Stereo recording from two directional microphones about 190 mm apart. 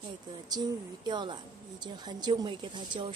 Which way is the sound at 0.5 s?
20° right (ahead or behind).